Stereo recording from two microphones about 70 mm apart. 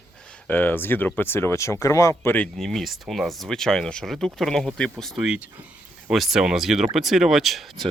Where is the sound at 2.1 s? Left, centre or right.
Left.